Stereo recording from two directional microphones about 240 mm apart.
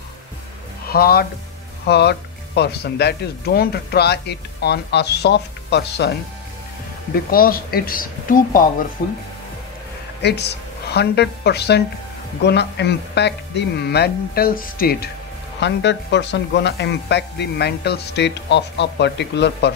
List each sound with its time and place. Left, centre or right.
0.8 s speech: left
7.2 s speech: left
10.2 s a woman's voice: left